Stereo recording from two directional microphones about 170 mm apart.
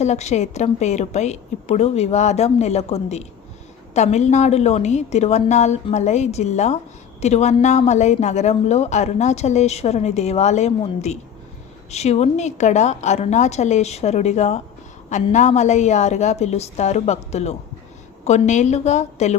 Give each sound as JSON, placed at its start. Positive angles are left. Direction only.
{"t": 0.0, "sound": "a woman's voice", "side_deg": 40}